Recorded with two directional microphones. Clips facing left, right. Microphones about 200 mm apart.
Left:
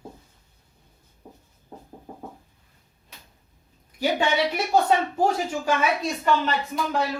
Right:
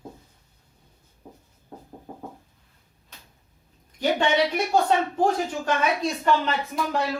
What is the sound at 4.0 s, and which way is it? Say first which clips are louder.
A woman's voice: right 1 dB; 10° left (ahead or behind).